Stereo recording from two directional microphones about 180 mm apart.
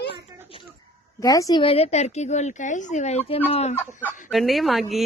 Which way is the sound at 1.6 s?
35° left (ahead or behind).